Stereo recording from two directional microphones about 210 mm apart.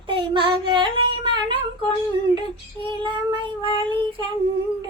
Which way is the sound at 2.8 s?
25° right (ahead or behind).